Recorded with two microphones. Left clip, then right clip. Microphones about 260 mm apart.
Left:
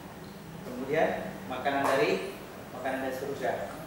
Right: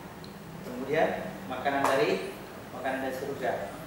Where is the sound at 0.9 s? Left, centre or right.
Centre.